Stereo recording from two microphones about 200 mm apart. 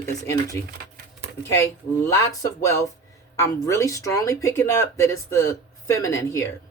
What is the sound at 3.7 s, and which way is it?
Speech, 15° left (ahead or behind).